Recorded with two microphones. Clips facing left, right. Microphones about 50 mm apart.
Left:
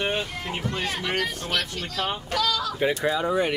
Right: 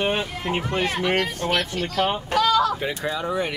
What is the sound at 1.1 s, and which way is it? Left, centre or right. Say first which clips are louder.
Speech: right 4 dB; right.